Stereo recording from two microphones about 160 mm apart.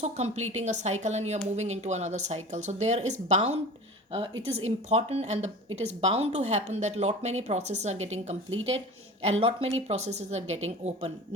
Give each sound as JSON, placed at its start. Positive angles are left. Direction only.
{"t": 0.0, "sound": "a woman's voice", "side_deg": -45}